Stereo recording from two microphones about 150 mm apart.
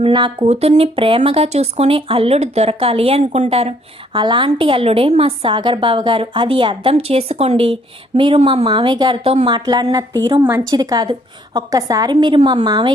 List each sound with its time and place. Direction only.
0.0 s speech: 30° right (ahead or behind)
0.4 s a woman's voice: 45° right (ahead or behind); by 12.9 s 30° right (ahead or behind)